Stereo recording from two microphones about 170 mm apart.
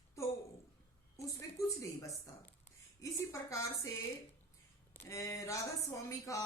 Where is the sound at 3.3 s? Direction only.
15° left (ahead or behind).